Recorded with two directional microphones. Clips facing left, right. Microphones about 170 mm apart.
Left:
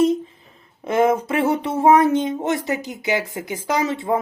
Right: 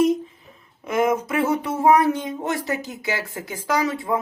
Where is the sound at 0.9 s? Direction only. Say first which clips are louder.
Left 3 dB; 30° left (ahead or behind).